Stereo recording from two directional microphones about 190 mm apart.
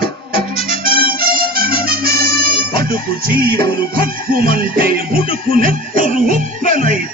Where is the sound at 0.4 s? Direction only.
30° left (ahead or behind).